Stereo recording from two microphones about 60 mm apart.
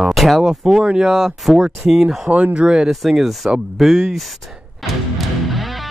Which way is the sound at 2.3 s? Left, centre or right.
Right.